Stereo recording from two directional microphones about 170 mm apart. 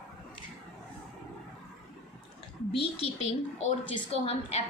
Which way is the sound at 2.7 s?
35° left (ahead or behind).